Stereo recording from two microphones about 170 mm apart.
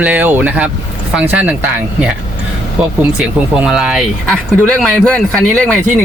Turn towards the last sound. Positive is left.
turn(degrees=5)  # may be behind; listen again after turning